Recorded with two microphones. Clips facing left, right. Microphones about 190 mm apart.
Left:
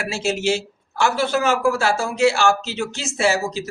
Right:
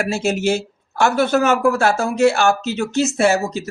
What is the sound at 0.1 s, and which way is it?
Speech, 55° right (ahead or behind).